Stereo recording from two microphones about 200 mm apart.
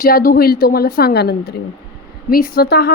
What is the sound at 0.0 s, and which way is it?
A woman's voice, 45° left (ahead or behind).